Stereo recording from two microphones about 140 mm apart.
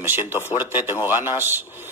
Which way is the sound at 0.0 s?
15° right (ahead or behind).